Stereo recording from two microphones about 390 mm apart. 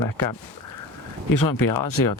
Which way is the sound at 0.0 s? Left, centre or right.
Left.